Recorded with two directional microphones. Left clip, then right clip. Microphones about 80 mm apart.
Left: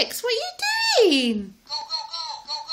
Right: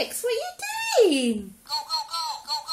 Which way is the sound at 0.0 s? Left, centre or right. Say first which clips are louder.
Left 3 dB; left.